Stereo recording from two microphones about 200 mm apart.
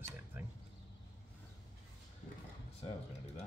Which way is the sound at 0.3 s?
10° right (ahead or behind).